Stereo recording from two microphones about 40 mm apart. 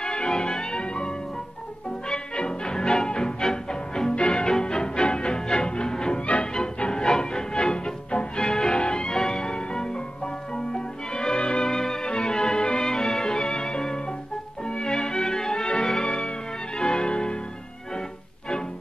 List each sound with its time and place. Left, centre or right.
0.0 s music: centre
4.5 s music: centre
11.7 s music: centre